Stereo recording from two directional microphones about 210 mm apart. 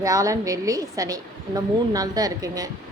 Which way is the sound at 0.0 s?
15° right (ahead or behind).